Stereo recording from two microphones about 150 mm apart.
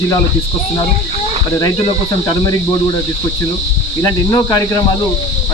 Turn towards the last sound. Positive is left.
turn(degrees=25)  # may be behind; listen again after turning